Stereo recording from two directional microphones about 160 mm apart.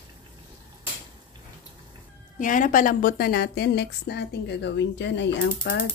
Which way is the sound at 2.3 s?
55° left (ahead or behind).